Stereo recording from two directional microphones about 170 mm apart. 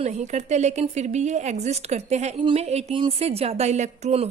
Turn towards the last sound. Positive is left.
turn(degrees=-40)  # may be behind; listen again after turning